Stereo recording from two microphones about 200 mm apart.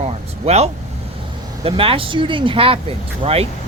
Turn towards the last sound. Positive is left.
turn(degrees=-30)  # may be behind; listen again after turning